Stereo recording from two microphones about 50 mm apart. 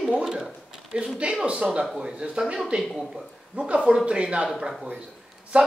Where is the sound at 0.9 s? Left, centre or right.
Centre.